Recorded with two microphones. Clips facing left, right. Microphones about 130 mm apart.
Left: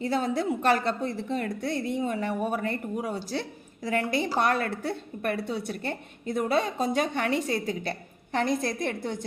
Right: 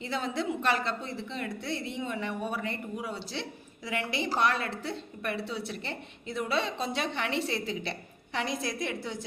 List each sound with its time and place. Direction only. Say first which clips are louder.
0.0 s a woman's voice: left 5 dB; 50° left (ahead or behind)